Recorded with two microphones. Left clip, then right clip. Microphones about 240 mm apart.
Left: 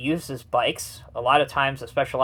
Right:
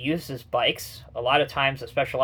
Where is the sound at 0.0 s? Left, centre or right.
Left.